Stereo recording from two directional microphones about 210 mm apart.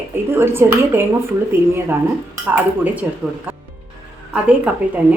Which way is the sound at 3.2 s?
Centre (ahead or behind).